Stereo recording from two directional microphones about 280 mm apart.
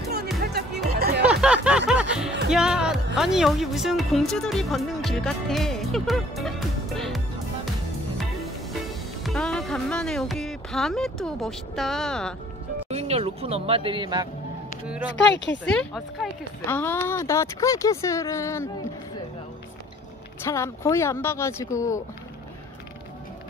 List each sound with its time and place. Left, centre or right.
0.4 s music: right
1.2 s music: centre
2.5 s speech: centre
9.2 s speech: centre
12.9 s speech: right
15.3 s speech: left
15.6 s speech: centre
20.4 s speech: centre